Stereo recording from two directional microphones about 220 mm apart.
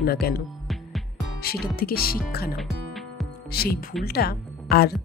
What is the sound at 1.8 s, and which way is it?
Speech, 45° left (ahead or behind).